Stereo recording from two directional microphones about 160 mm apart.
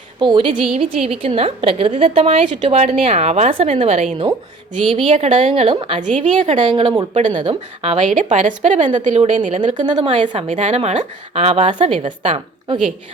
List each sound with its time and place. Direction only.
0.2 s a woman's voice: 30° right (ahead or behind)
5.7 s a woman's voice: 30° right (ahead or behind)
6.0 s a woman's voice: 45° right (ahead or behind)
6.6 s a woman's voice: 30° right (ahead or behind)
7.1 s a woman's voice: 50° right (ahead or behind); by 12.8 s 30° right (ahead or behind)